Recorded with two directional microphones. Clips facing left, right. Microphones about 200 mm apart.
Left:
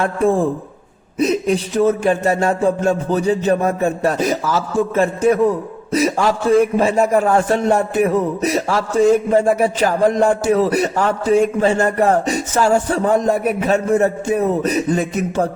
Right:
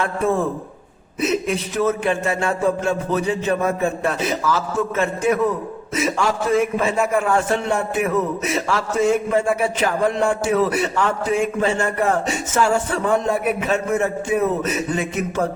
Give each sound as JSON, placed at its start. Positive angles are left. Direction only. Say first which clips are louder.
{"t": 0.0, "sound": "a man's voice", "louder": "left 4 dB", "side_deg": 30}